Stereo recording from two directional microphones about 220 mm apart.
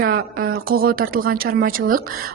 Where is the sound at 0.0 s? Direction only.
45° right (ahead or behind).